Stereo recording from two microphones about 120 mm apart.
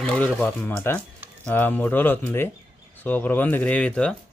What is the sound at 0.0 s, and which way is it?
Speech, 5° left (ahead or behind).